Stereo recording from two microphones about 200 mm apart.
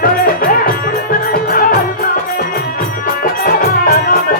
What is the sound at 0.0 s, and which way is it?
Music, 45° left (ahead or behind).